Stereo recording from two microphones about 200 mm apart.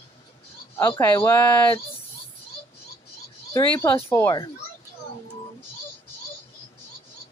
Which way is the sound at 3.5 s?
15° left (ahead or behind).